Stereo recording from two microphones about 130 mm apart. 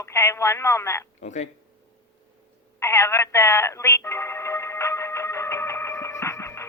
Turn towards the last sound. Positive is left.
turn(degrees=20)  # may be behind; listen again after turning